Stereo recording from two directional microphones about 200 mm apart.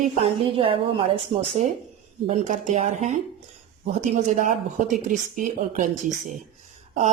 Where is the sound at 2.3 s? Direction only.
35° right (ahead or behind).